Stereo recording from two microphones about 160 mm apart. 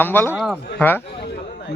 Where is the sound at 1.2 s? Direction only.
90° left.